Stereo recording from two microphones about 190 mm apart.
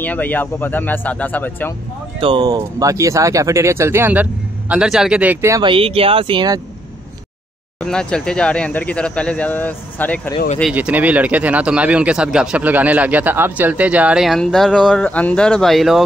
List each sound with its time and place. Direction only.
0.0 s speech: 10° left (ahead or behind)
2.1 s speech: 25° right (ahead or behind); by 5.6 s 10° right (ahead or behind)
5.6 s speech: 30° right (ahead or behind)
7.8 s speech: 5° left (ahead or behind)
10.6 s speech: 5° right (ahead or behind)